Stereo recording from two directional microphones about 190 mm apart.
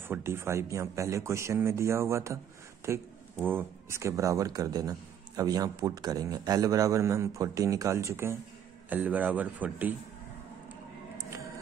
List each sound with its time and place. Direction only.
0.1 s a man's voice: 15° right (ahead or behind)
3.4 s a man's voice: 10° right (ahead or behind)